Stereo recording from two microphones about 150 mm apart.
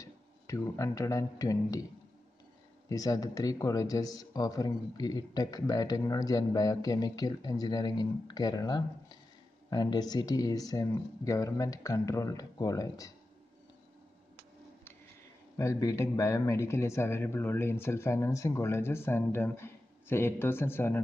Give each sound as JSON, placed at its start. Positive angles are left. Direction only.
{"t": 0.0, "sound": "speech", "side_deg": 20}
{"t": 2.9, "sound": "speech", "side_deg": 25}
{"t": 15.5, "sound": "speech", "side_deg": 20}